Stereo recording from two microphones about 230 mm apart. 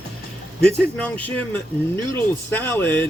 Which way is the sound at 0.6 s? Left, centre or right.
Centre.